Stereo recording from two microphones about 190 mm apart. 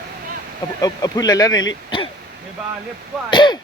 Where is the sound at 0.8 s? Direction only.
20° left (ahead or behind).